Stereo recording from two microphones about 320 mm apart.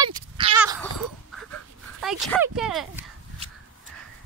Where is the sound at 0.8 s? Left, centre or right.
Centre.